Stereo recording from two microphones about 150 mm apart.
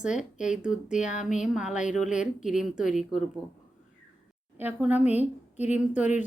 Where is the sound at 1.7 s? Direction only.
55° left (ahead or behind).